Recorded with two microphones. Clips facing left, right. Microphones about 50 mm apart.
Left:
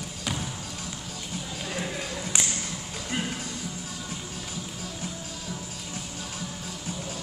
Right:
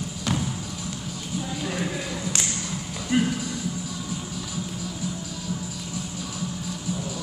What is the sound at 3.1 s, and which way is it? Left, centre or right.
Music, centre.